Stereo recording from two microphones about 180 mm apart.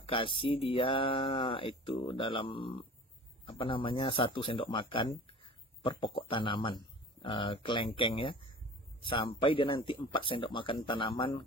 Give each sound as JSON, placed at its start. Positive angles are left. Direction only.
{"t": 0.0, "sound": "speech", "side_deg": 30}